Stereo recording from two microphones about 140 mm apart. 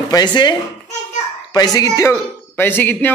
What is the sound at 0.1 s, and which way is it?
A man's voice, 30° left (ahead or behind).